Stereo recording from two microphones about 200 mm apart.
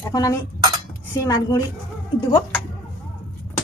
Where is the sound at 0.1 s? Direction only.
15° left (ahead or behind).